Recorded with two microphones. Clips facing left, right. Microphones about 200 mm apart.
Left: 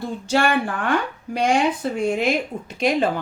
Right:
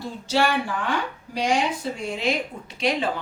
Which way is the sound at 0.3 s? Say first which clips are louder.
Left 2 dB; 55° left (ahead or behind).